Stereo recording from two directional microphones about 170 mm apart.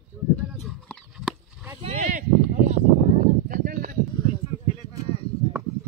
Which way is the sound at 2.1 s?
45° right (ahead or behind).